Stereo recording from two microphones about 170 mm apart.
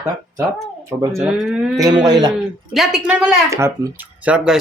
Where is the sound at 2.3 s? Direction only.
Centre (ahead or behind).